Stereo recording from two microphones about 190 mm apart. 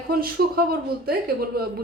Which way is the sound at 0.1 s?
55° right (ahead or behind).